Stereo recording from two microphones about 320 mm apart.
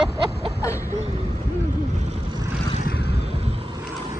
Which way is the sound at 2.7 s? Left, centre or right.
Left.